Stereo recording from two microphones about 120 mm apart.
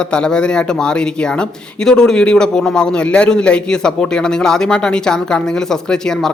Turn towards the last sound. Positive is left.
turn(degrees=5)  # may be behind; listen again after turning